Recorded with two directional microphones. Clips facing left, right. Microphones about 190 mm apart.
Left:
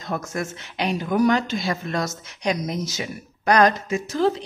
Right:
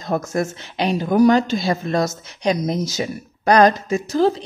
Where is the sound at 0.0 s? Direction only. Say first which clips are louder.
Right 6 dB; 35° right (ahead or behind).